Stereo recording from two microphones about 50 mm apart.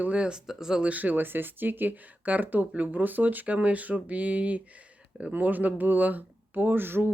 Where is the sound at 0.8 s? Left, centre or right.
Right.